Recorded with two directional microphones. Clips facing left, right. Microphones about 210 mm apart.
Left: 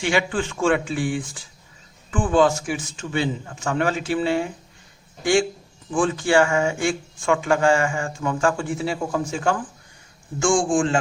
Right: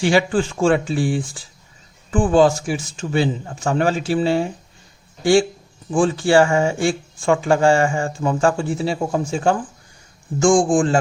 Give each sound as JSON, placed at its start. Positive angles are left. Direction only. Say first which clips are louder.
{"t": 0.0, "sound": "speech", "louder": "right 5 dB", "side_deg": -35}